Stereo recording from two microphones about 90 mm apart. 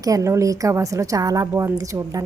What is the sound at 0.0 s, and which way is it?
A woman's voice, 40° right (ahead or behind).